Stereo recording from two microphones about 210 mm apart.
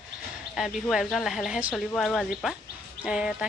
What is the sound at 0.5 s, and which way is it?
Speech, centre (ahead or behind).